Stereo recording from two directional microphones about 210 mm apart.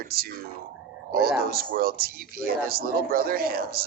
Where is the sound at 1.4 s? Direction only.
45° right (ahead or behind).